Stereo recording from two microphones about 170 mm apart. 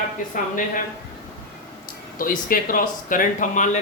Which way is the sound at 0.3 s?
50° left (ahead or behind).